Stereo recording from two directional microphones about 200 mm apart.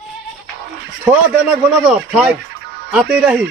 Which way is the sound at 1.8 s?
5° right (ahead or behind).